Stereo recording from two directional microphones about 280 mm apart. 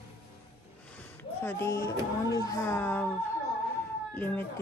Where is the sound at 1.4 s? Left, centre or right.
Centre.